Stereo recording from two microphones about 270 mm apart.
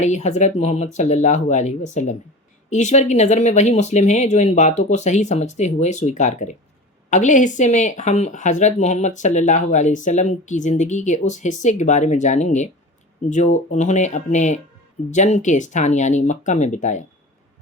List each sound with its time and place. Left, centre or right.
0.0 s speech: left